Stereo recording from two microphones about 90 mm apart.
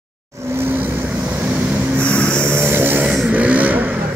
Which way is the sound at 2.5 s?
25° right (ahead or behind).